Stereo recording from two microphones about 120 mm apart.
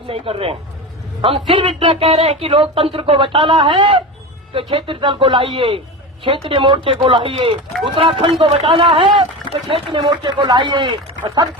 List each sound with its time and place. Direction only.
0.1 s speech: 55° right (ahead or behind)